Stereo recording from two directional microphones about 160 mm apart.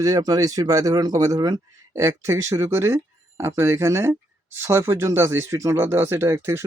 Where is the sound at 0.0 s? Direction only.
20° right (ahead or behind).